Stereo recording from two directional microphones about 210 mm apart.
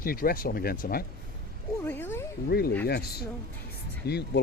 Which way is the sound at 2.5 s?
45° left (ahead or behind).